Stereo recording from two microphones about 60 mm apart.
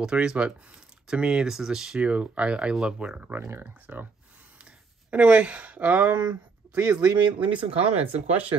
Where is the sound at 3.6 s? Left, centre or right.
Right.